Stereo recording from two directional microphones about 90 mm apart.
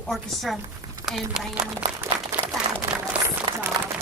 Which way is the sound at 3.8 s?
50° right (ahead or behind).